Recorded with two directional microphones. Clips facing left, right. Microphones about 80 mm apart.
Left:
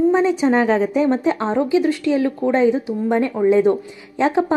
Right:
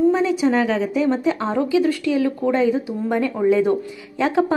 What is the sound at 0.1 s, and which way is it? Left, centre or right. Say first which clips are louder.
Speech: left 2 dB; left.